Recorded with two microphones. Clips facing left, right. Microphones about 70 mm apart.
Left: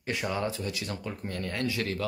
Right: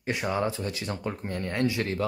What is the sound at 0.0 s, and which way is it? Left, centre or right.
Speech, right.